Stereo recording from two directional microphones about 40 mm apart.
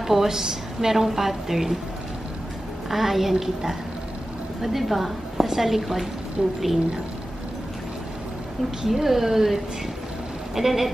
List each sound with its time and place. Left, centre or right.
0.0 s a woman's voice: centre
2.9 s a woman's voice: centre
6.4 s a woman's voice: right
8.8 s a woman's voice: centre